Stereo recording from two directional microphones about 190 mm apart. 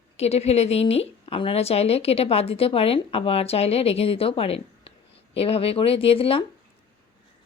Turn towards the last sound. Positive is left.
turn(degrees=30)  # may be behind; listen again after turning